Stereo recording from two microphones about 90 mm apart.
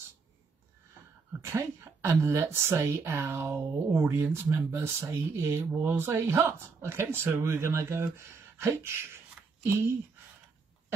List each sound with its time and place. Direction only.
1.4 s speech: 30° right (ahead or behind)